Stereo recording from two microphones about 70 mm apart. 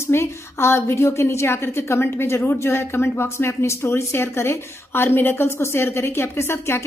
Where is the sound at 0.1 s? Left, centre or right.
Left.